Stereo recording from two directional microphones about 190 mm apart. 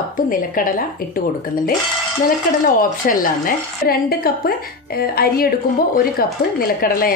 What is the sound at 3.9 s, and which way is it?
A woman's voice, 50° left (ahead or behind).